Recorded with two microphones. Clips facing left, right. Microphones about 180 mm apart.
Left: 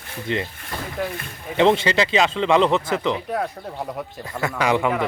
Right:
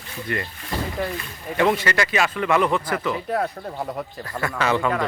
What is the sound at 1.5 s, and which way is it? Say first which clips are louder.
Speech: left 3 dB; 25° left (ahead or behind).